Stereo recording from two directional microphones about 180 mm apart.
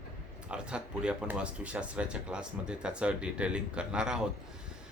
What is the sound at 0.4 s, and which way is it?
Speech, 5° right (ahead or behind).